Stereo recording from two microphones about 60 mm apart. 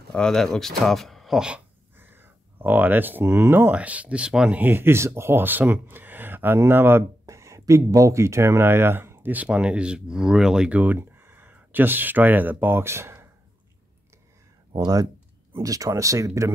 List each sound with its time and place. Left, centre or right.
0.1 s speech: centre
2.0 s speech: right
3.7 s speech: right
4.6 s speech: right
7.2 s speech: right
9.5 s speech: centre
10.7 s speech: right
11.0 s a sound: right
11.5 s speech: right
15.6 s speech: right
15.9 s speech: right